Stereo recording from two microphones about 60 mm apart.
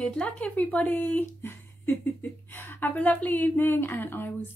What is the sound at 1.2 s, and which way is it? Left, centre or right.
A woman's voice, left.